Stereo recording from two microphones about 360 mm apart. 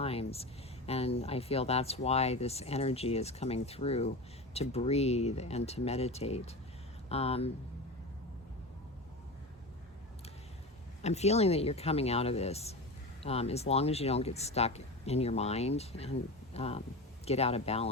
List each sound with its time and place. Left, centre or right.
0.0 s a sound: centre
0.9 s speech: centre
11.0 s speech: centre